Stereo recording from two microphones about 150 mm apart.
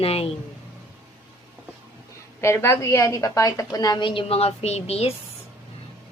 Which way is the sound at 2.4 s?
20° left (ahead or behind).